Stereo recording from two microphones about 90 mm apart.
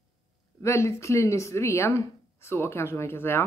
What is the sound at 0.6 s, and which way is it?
Speech, 30° left (ahead or behind).